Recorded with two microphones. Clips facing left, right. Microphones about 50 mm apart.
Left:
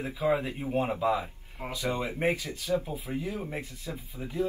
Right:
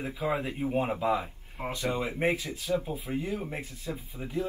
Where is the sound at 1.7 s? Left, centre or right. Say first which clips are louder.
Even; right.